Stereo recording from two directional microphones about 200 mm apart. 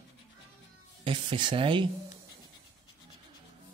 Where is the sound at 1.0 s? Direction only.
25° right (ahead or behind).